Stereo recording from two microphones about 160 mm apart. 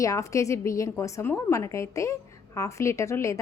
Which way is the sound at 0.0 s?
20° left (ahead or behind).